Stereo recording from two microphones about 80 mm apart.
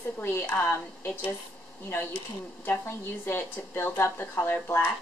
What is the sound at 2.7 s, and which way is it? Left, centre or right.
A woman's voice, left.